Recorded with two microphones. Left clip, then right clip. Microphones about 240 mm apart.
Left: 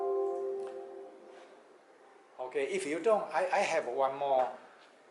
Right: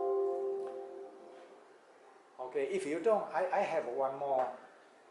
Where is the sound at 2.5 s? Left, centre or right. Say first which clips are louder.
Left 1 dB; centre.